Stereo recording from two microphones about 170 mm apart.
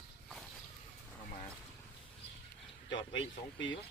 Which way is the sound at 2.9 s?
25° left (ahead or behind).